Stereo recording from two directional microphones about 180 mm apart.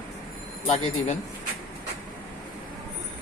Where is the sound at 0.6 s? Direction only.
40° left (ahead or behind).